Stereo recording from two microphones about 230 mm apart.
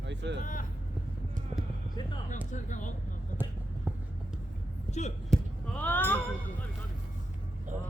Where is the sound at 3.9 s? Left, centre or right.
Centre.